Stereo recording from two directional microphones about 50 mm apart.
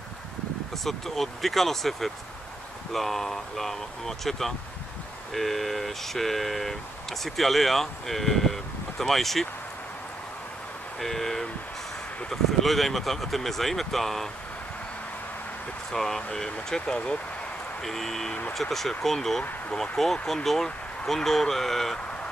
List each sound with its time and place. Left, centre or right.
0.8 s speech: centre
11.0 s speech: centre
12.5 s speech: centre
15.9 s speech: centre
17.8 s speech: centre